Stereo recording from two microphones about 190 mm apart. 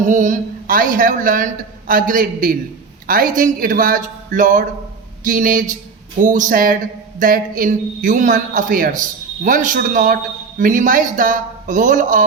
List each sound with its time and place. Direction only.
0.0 s a man's voice: 40° right (ahead or behind)